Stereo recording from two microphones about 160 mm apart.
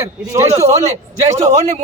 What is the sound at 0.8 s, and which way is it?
Speech, 45° right (ahead or behind).